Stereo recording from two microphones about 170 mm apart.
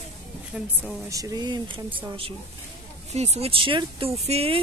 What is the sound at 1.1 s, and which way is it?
Speech, 20° right (ahead or behind).